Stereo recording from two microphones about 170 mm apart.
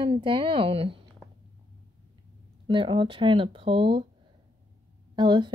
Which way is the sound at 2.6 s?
30° right (ahead or behind).